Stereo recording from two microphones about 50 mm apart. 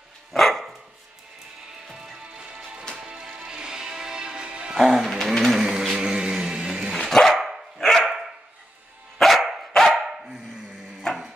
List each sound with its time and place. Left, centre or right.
0.3 s dog: centre
2.3 s music: centre
4.7 s music: centre
7.0 s dog: centre
9.2 s dog: centre
10.0 s dog: centre